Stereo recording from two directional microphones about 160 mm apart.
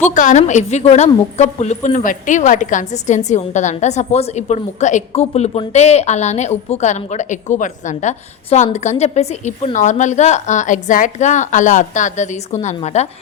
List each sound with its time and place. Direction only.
0.0 s a woman's voice: 50° left (ahead or behind)